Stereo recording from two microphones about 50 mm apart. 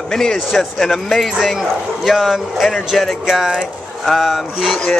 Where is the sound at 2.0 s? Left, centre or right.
Centre.